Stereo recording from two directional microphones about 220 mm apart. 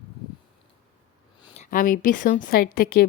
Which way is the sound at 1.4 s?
30° left (ahead or behind).